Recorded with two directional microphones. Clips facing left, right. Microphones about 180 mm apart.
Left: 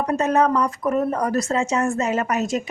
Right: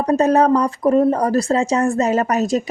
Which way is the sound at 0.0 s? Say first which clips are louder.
Right 5 dB; 35° right (ahead or behind).